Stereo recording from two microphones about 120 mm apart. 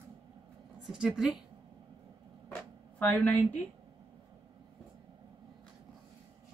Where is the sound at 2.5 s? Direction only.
15° left (ahead or behind).